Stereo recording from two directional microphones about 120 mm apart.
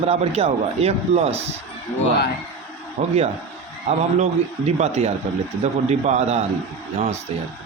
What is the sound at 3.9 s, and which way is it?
Speech, 65° right (ahead or behind).